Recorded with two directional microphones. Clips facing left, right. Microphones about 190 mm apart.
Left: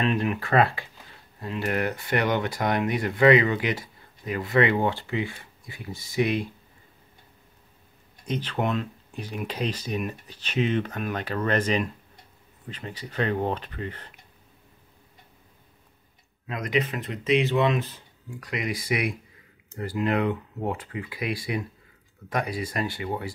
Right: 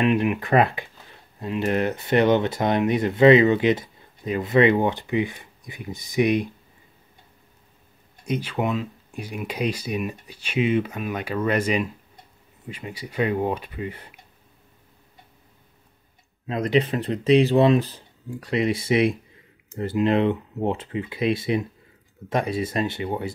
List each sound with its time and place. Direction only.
0.0 s a sound: 15° right (ahead or behind)
1.4 s speech: 20° right (ahead or behind)
8.3 s speech: 10° right (ahead or behind)
16.4 s speech: 30° right (ahead or behind)